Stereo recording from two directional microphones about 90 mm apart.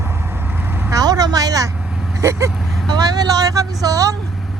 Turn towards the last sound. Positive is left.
turn(degrees=-40)  # may be behind; listen again after turning